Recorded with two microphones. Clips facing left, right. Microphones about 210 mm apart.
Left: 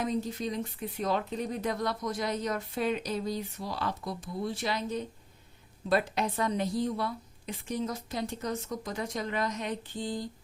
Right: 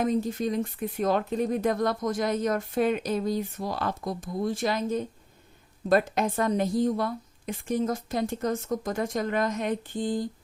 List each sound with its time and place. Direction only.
0.0 s speech: 50° right (ahead or behind)